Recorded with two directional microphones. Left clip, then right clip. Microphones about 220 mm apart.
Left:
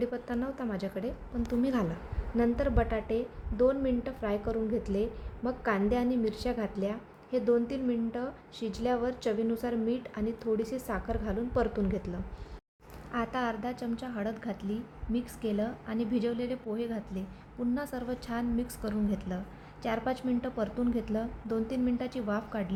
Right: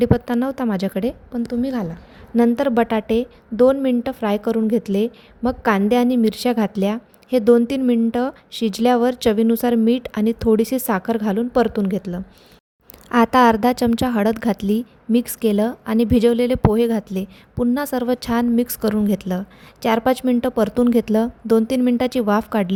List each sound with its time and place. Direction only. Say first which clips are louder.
0.0 s a woman's voice: right 15 dB; 40° right (ahead or behind)
1.5 s a woman's voice: right 6 dB; 25° right (ahead or behind)
2.3 s a woman's voice: right 12 dB; 40° right (ahead or behind)